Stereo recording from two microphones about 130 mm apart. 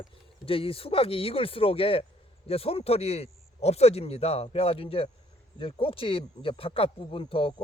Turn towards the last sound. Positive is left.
turn(degrees=45)  # may be behind; listen again after turning